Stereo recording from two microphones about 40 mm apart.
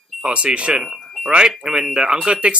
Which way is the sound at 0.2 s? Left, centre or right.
Right.